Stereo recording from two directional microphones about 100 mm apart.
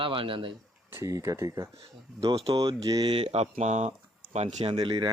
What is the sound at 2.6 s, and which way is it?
Speech, 40° right (ahead or behind).